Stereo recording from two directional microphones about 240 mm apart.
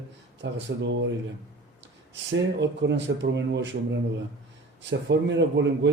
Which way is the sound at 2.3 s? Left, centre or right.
Right.